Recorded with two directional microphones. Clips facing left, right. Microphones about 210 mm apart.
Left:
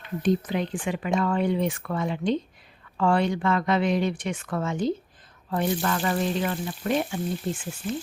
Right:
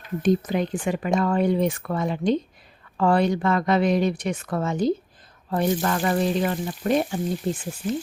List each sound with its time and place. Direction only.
0.2 s speech: 45° right (ahead or behind)